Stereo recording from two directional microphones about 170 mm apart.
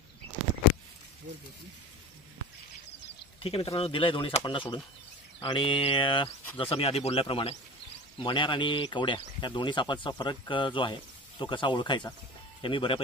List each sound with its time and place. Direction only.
3.4 s speech: 35° left (ahead or behind)